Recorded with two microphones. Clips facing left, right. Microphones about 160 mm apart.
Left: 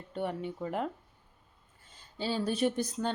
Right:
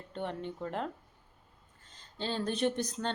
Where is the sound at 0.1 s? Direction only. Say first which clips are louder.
Left 3 dB; 10° left (ahead or behind).